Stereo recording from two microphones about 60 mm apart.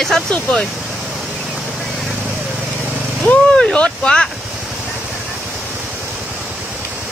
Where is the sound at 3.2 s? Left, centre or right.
Centre.